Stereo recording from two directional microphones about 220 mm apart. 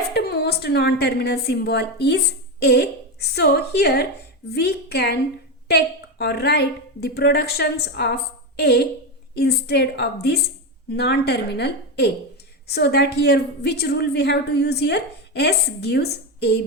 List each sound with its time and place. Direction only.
0.1 s a woman's voice: 50° left (ahead or behind)